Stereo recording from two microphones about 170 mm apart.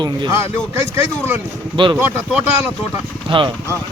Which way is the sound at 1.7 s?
30° right (ahead or behind).